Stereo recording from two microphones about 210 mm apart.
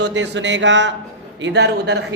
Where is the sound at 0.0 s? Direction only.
60° right (ahead or behind).